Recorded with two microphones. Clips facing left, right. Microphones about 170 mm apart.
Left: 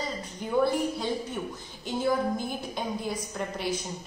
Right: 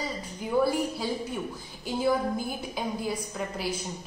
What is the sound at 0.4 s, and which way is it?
A woman's voice, 5° right (ahead or behind).